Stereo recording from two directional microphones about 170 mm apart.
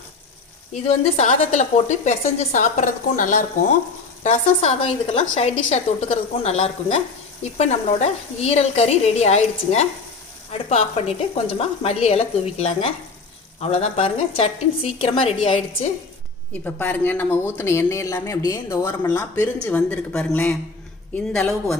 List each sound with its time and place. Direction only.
0.9 s a woman's voice: 40° left (ahead or behind)
16.5 s speech: 10° left (ahead or behind)